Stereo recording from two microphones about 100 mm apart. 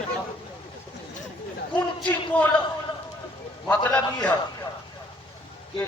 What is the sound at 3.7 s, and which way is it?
Speech, 10° left (ahead or behind).